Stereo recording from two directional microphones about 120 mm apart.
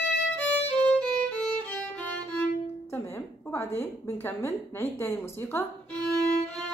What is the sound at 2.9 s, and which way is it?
A woman's voice, 20° left (ahead or behind).